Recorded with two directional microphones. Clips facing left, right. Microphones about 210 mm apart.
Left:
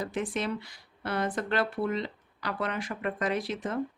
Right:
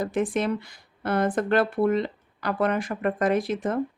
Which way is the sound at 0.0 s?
50° right (ahead or behind).